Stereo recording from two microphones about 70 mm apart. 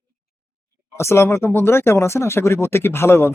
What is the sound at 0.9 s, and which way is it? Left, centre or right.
A man's voice, left.